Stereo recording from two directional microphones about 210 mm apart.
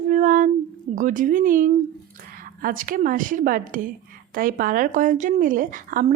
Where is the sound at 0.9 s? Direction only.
40° right (ahead or behind).